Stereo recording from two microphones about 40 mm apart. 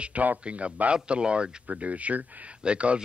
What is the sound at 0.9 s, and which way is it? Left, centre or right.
A man's voice, right.